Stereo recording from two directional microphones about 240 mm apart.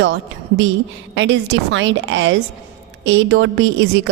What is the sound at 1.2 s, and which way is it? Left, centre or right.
A woman's voice, right.